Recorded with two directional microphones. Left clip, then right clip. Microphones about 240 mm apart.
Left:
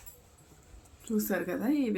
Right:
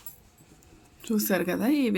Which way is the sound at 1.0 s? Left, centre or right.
Right.